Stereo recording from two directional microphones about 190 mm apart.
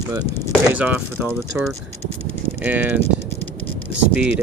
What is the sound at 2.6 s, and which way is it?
Speech, 10° right (ahead or behind).